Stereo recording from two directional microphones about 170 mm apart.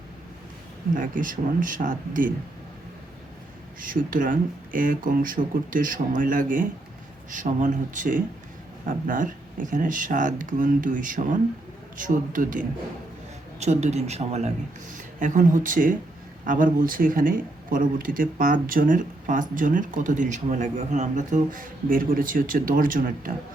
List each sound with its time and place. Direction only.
0.9 s speech: 50° right (ahead or behind)
3.8 s speech: 55° right (ahead or behind)
13.6 s speech: 40° right (ahead or behind)